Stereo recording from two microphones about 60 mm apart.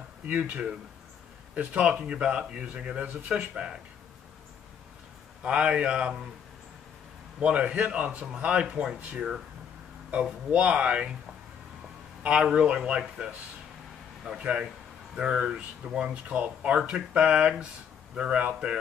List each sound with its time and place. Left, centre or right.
0.3 s speech: right
5.4 s speech: centre
7.3 s speech: centre
10.2 s speech: centre
12.2 s speech: centre
14.4 s speech: centre